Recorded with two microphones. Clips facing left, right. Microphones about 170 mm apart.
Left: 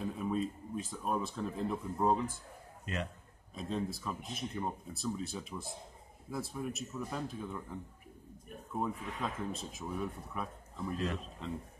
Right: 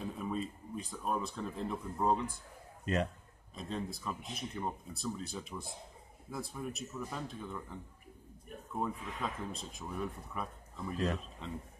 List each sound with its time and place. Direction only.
0.0 s speech: centre (ahead or behind)
2.8 s a man's voice: 40° right (ahead or behind)
3.5 s speech: centre (ahead or behind)
8.7 s speech: centre (ahead or behind)